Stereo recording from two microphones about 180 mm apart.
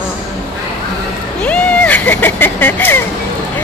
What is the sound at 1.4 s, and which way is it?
A woman's voice, 10° left (ahead or behind).